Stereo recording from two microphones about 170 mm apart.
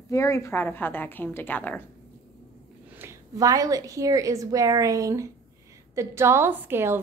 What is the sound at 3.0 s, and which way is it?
A woman's voice, 20° right (ahead or behind).